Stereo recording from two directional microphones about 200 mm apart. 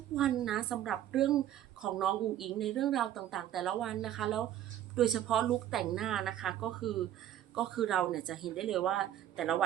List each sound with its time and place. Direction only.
0.2 s speech: centre (ahead or behind)